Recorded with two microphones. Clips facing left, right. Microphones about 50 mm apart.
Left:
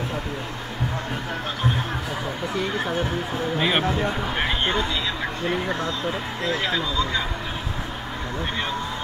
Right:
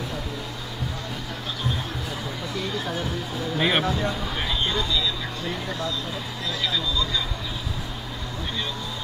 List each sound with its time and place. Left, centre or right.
2.5 s speech: left
3.5 s speech: centre
3.8 s speech: left